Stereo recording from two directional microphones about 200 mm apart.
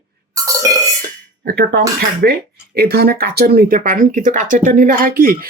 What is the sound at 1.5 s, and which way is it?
Speech, 50° right (ahead or behind).